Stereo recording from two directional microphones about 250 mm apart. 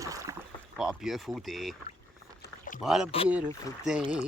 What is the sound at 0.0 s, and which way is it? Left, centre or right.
Rowboat, centre.